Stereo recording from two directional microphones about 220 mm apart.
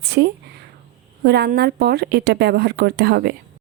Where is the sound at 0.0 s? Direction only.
45° right (ahead or behind).